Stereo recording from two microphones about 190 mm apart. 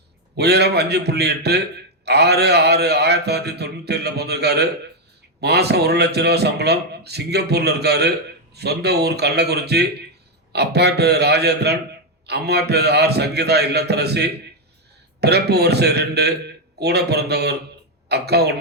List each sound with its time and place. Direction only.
0.3 s speech: 60° right (ahead or behind)